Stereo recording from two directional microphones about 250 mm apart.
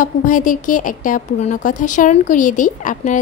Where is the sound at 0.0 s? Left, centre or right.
Left.